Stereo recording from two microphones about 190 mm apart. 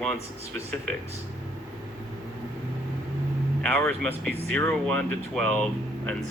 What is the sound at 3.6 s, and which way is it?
Speech, 5° left (ahead or behind).